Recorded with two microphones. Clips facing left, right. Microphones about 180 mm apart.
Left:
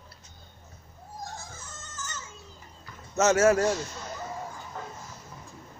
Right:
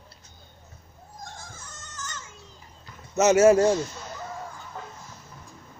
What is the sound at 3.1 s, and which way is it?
Speech, 15° right (ahead or behind).